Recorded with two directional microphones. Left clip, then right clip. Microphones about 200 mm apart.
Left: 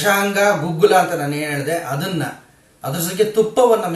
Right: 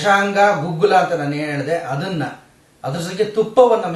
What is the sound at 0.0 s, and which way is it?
A man's voice, 5° left (ahead or behind).